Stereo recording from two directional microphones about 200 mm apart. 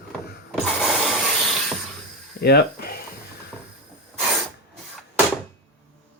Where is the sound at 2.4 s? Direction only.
55° left (ahead or behind).